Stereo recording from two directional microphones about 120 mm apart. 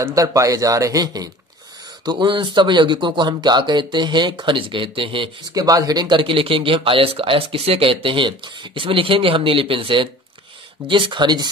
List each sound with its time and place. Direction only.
0.0 s speech: 30° right (ahead or behind); by 5.3 s 45° right (ahead or behind)
5.5 s speech: 30° right (ahead or behind)